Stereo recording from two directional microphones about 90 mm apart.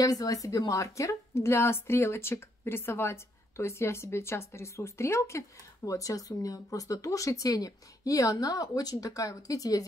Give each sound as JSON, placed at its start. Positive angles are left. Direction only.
{"t": 0.0, "sound": "a woman's voice", "side_deg": 40}